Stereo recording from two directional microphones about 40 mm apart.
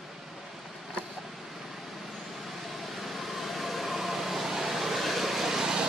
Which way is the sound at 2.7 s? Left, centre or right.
Centre.